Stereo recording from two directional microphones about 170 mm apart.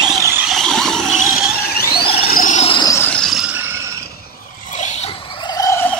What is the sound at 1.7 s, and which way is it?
Squeal, 65° left (ahead or behind).